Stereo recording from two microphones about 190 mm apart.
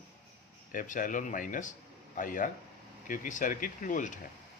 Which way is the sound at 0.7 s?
45° left (ahead or behind).